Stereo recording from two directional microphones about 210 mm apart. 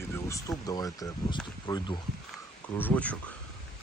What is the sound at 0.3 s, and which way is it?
Speech, 15° left (ahead or behind).